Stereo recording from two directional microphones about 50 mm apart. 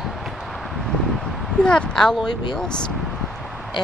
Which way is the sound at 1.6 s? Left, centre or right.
Centre.